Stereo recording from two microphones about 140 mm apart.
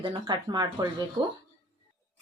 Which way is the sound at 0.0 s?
30° right (ahead or behind).